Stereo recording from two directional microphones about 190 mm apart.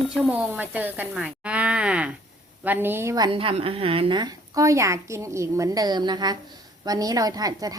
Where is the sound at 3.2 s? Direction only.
30° right (ahead or behind).